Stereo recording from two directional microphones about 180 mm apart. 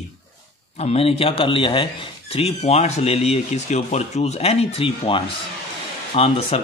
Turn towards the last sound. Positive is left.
turn(degrees=35)  # may be behind; listen again after turning